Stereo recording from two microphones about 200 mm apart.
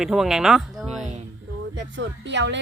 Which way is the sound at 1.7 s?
60° right (ahead or behind).